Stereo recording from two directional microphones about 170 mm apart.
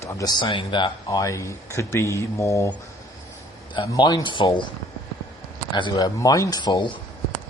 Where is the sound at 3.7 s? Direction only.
25° left (ahead or behind).